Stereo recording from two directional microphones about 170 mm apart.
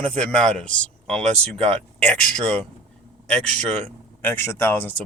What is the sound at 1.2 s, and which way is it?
Speech, 40° right (ahead or behind).